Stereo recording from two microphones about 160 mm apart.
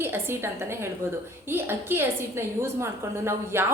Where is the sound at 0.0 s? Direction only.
15° right (ahead or behind).